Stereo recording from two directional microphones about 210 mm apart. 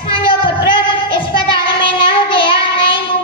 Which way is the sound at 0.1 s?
25° left (ahead or behind).